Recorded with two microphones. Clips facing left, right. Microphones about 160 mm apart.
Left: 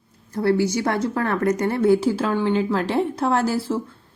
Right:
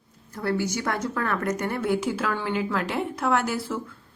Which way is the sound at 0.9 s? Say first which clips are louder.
Left 5 dB; 30° left (ahead or behind).